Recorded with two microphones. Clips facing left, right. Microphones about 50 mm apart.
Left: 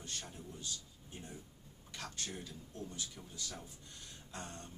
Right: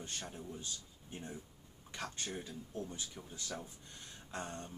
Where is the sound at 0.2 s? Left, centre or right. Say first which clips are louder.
Right 4 dB; centre.